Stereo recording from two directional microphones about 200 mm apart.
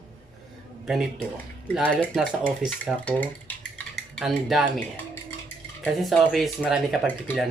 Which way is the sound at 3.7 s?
Centre (ahead or behind).